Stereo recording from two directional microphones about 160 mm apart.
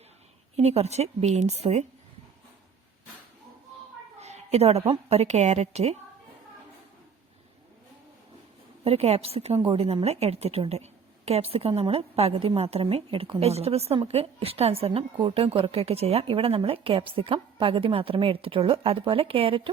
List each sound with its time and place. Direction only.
0.5 s a woman's voice: 40° right (ahead or behind)
4.2 s a sound: 40° right (ahead or behind)
4.9 s a woman's voice: 40° right (ahead or behind)
8.8 s a woman's voice: 40° right (ahead or behind)